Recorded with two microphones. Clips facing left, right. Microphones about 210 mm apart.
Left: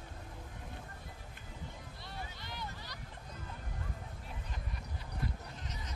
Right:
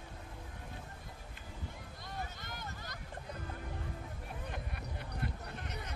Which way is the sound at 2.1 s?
45° right (ahead or behind).